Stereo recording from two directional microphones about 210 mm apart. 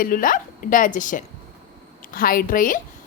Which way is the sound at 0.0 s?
40° left (ahead or behind).